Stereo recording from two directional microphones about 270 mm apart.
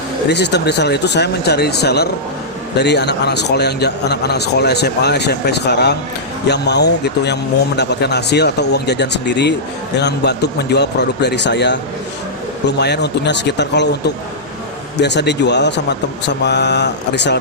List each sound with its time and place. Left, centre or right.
0.3 s a man's voice: left
15.0 s a man's voice: left